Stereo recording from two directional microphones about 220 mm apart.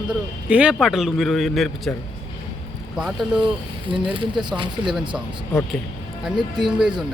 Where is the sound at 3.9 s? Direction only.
25° right (ahead or behind).